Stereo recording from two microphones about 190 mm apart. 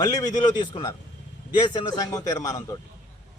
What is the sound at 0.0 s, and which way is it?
A man's voice, 20° left (ahead or behind).